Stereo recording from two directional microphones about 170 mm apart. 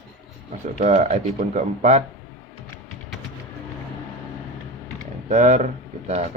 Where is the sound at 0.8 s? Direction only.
45° right (ahead or behind).